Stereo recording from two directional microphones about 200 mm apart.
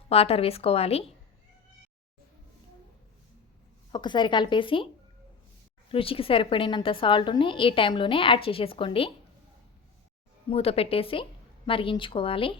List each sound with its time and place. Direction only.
0.1 s a woman's voice: 30° left (ahead or behind)
3.9 s a woman's voice: 20° left (ahead or behind)
5.9 s a woman's voice: 25° left (ahead or behind)
10.5 s a woman's voice: 30° left (ahead or behind)